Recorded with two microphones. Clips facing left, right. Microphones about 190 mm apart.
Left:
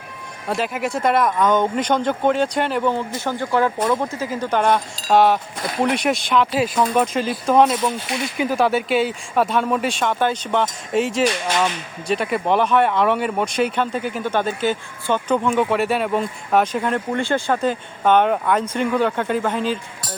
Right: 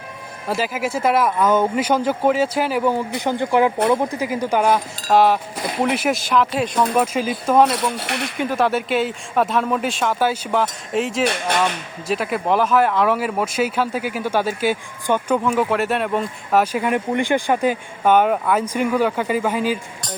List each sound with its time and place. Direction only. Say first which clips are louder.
0.4 s speech: even; centre (ahead or behind)
7.7 s speech: left 1 dB; 70° right (ahead or behind)
8.4 s speech: left 1 dB; centre (ahead or behind)